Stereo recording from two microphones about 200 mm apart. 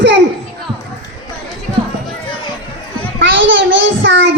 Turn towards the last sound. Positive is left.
turn(degrees=-65)  # may be behind; listen again after turning